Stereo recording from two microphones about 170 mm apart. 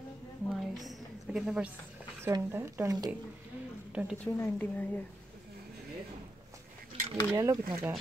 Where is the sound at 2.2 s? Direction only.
15° right (ahead or behind).